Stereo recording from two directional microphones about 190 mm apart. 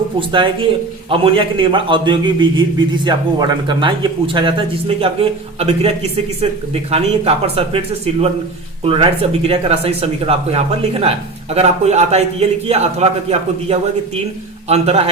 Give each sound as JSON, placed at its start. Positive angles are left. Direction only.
{"t": 0.2, "sound": "a man's voice", "side_deg": -25}
{"t": 14.7, "sound": "speech", "side_deg": -35}